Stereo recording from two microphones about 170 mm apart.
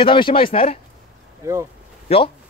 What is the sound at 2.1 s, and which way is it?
Speech, 35° left (ahead or behind).